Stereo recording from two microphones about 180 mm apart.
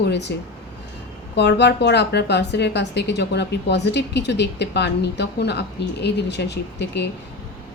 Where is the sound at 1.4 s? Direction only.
70° left (ahead or behind).